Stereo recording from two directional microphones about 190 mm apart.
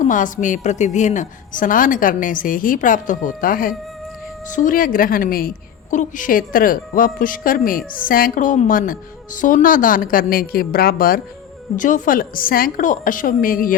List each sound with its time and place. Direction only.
0.0 s a woman's voice: 40° left (ahead or behind)